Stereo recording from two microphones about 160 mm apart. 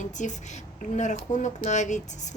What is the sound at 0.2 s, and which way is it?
Speech, 50° left (ahead or behind).